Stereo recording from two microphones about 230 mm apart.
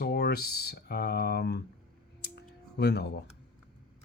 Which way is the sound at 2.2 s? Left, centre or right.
Left.